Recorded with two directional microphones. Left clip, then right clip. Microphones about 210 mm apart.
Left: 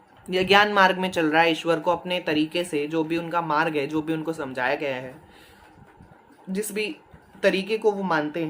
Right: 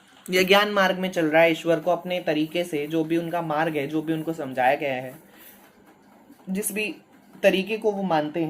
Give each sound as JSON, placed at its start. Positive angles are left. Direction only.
{"t": 0.3, "sound": "speech", "side_deg": 15}
{"t": 6.6, "sound": "speech", "side_deg": 20}